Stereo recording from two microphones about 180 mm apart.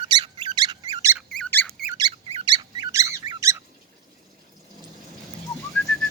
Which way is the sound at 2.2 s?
30° right (ahead or behind).